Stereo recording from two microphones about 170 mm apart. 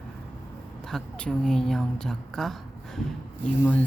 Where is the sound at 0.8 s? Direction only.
5° left (ahead or behind).